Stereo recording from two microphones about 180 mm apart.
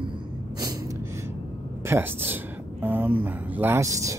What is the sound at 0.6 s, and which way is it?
Gasp, 20° right (ahead or behind).